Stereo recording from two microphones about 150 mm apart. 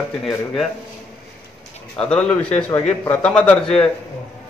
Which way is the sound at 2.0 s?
5° left (ahead or behind).